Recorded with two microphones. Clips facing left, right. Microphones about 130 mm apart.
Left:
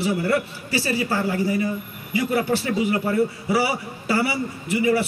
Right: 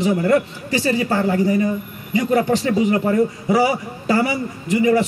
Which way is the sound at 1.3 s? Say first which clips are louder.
Right 5 dB; 40° right (ahead or behind).